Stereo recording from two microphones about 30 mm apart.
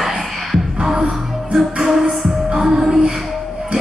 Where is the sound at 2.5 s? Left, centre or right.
Right.